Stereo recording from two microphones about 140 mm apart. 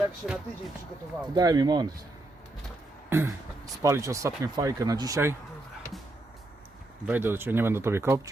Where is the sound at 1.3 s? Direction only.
30° right (ahead or behind).